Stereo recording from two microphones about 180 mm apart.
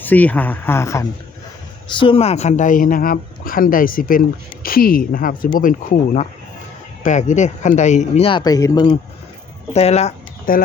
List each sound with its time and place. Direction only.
0.0 s speech: 10° left (ahead or behind)
1.9 s speech: 30° left (ahead or behind)
9.7 s speech: 35° left (ahead or behind)